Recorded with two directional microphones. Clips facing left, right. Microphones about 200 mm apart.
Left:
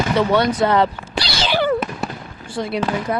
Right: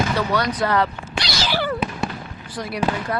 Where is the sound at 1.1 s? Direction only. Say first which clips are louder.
Left 3 dB; 30° left (ahead or behind).